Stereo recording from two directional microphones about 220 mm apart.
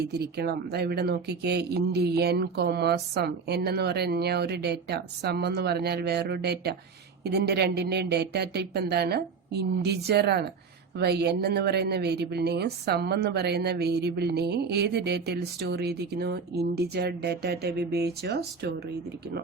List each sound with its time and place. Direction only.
0.1 s speech: 45° right (ahead or behind)